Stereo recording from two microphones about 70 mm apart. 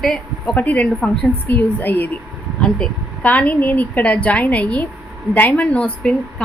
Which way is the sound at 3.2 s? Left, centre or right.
Left.